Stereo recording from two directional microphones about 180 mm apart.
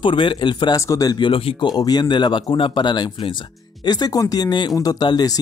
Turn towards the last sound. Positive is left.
turn(degrees=20)  # may be behind; listen again after turning